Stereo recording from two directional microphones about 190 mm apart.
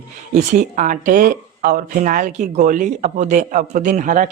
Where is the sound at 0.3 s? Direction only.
40° right (ahead or behind).